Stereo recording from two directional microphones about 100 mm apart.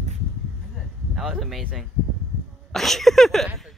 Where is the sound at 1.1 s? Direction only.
5° right (ahead or behind).